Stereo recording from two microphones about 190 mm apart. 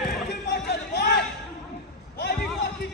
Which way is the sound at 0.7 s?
60° left (ahead or behind).